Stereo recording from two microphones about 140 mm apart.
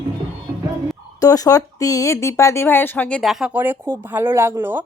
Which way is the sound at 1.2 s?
25° left (ahead or behind).